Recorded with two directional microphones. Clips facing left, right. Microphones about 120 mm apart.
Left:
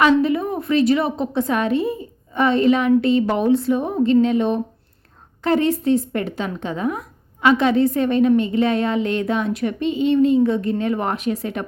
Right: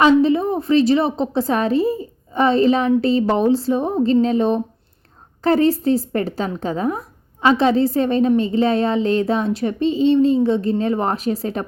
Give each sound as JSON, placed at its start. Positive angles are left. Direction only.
{"t": 0.0, "sound": "a woman's voice", "side_deg": -30}